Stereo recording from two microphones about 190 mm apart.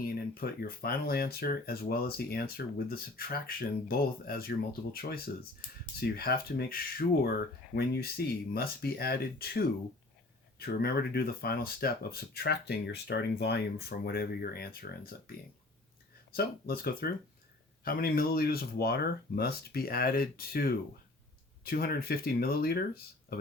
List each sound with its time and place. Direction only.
0.0 s speech: 50° left (ahead or behind)
16.3 s speech: 50° left (ahead or behind)